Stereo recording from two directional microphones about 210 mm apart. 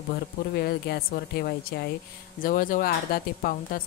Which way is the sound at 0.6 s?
50° left (ahead or behind).